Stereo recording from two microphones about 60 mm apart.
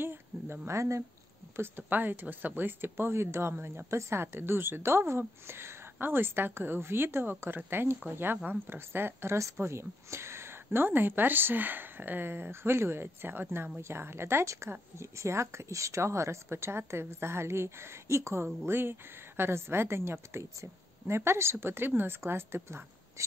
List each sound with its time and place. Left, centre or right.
0.0 s speech: right
1.6 s a woman's voice: right